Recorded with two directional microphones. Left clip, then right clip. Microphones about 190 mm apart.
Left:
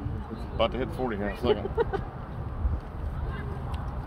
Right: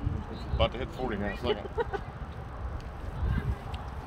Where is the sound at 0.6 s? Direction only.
50° left (ahead or behind).